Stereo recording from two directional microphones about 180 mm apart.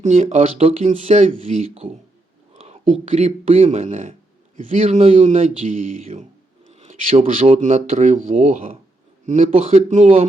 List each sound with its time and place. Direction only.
0.0 s speech: 40° right (ahead or behind)
2.5 s a sound: 35° right (ahead or behind)
3.1 s speech: 35° right (ahead or behind)
7.5 s speech: 45° right (ahead or behind)